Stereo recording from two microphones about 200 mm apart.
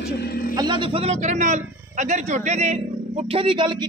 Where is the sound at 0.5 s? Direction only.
20° right (ahead or behind).